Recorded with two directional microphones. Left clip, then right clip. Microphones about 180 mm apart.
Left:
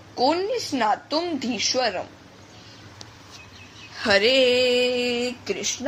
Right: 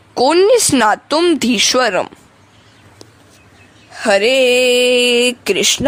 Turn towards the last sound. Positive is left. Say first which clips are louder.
# right 13 dB
turn(degrees=-60)  # may be behind; listen again after turning